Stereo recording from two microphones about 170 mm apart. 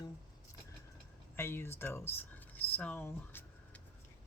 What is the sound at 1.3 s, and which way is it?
Speech, 15° left (ahead or behind).